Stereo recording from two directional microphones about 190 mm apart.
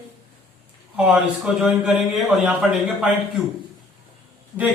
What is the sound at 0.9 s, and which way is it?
Speech, 5° right (ahead or behind).